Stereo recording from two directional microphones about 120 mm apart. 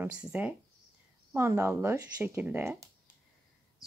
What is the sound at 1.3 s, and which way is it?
A woman's voice, 20° right (ahead or behind).